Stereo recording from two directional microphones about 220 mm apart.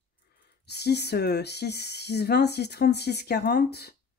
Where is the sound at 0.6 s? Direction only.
50° left (ahead or behind).